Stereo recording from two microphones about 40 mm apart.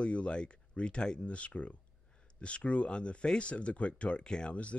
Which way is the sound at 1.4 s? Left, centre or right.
Left.